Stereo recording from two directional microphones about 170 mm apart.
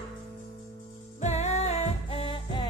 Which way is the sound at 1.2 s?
40° left (ahead or behind).